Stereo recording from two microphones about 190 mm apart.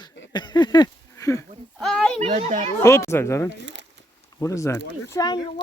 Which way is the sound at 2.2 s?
35° right (ahead or behind).